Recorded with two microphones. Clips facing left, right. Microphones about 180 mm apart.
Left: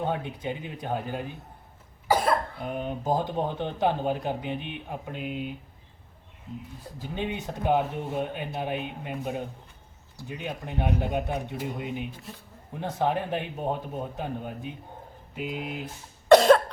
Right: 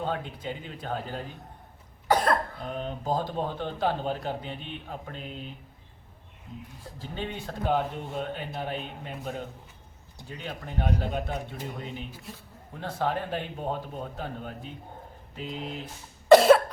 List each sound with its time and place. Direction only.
0.0 s speech: 15° left (ahead or behind)
7.0 s speech: 10° left (ahead or behind)
16.3 s cough: centre (ahead or behind)